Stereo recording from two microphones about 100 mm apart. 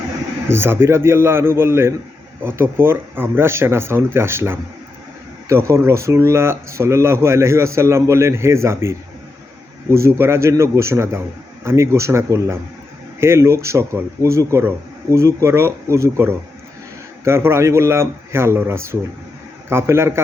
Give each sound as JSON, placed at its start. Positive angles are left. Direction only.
{"t": 0.4, "sound": "speech", "side_deg": -25}